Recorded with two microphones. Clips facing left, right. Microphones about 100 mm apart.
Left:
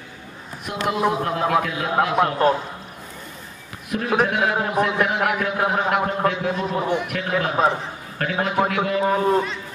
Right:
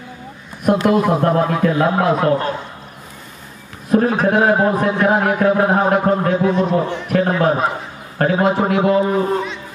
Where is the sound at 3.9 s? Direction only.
35° right (ahead or behind).